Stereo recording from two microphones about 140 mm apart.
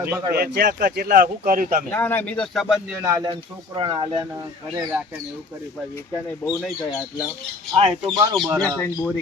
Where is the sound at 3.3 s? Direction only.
40° right (ahead or behind).